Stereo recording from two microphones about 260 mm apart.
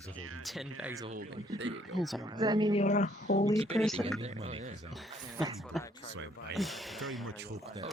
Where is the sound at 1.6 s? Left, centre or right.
Right.